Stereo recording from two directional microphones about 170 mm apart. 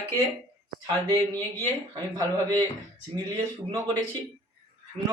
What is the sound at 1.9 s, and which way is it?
Speech, 20° right (ahead or behind).